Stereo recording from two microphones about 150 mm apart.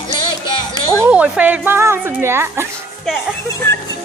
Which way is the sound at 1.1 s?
10° right (ahead or behind).